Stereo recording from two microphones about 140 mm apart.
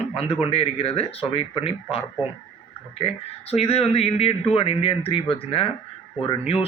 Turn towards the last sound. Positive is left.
turn(degrees=40)  # may be behind; listen again after turning